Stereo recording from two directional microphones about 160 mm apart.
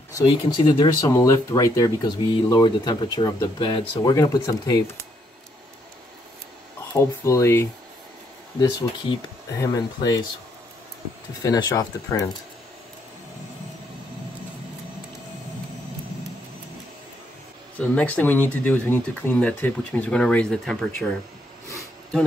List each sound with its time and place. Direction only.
0.1 s speech: 30° left (ahead or behind)
6.9 s speech: 20° left (ahead or behind)
8.5 s speech: 30° left (ahead or behind)
11.4 s speech: 25° left (ahead or behind)
17.7 s speech: 10° left (ahead or behind)